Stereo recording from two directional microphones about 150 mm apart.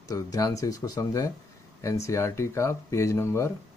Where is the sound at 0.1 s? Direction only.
25° left (ahead or behind).